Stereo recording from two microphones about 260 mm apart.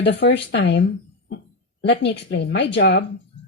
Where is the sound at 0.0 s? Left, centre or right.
Left.